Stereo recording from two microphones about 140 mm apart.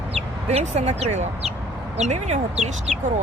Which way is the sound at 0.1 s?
50° right (ahead or behind).